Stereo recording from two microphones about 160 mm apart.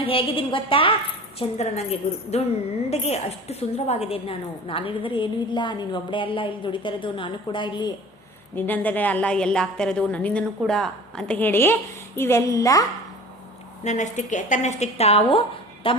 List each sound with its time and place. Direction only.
0.0 s a woman's voice: 35° left (ahead or behind)
8.5 s a woman's voice: 10° left (ahead or behind)
13.8 s a woman's voice: 50° left (ahead or behind)